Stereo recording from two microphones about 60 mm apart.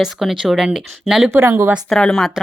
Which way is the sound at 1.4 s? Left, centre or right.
Right.